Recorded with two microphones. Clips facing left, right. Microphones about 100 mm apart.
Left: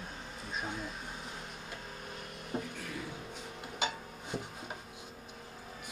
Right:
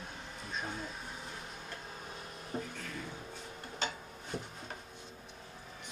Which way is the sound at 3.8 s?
15° left (ahead or behind).